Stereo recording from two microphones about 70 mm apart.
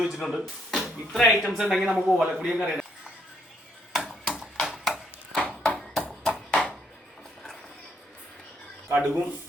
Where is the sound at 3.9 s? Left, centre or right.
Centre.